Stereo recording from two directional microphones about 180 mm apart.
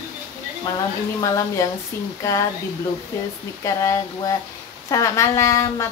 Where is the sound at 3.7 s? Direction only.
15° left (ahead or behind).